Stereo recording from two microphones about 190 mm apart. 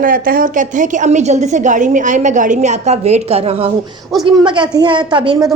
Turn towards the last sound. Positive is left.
turn(degrees=-20)  # may be behind; listen again after turning